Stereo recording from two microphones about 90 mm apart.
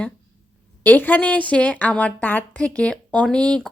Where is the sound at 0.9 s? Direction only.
20° left (ahead or behind).